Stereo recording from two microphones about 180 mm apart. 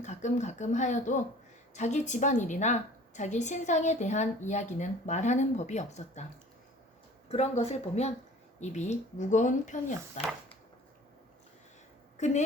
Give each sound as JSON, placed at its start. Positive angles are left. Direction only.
{"t": 0.0, "sound": "speech", "side_deg": 40}
{"t": 7.3, "sound": "speech", "side_deg": 35}
{"t": 12.1, "sound": "a woman's voice", "side_deg": 40}